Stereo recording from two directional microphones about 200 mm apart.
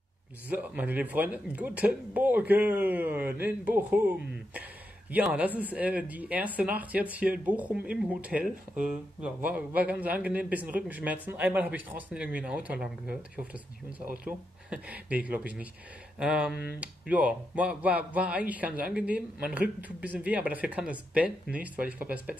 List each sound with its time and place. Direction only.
0.5 s speech: 10° right (ahead or behind)
5.1 s speech: 10° right (ahead or behind)